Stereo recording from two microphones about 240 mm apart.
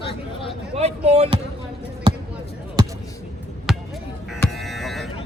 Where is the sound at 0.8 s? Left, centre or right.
Right.